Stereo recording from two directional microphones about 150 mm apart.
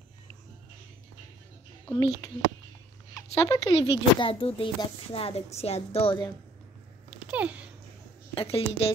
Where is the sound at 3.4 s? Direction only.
35° left (ahead or behind).